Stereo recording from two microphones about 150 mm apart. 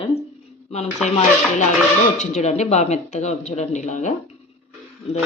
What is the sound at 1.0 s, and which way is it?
Speech, 50° left (ahead or behind).